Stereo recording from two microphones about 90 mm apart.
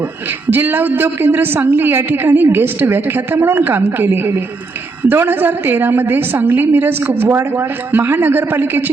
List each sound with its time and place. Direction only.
0.5 s a woman's voice: 25° right (ahead or behind)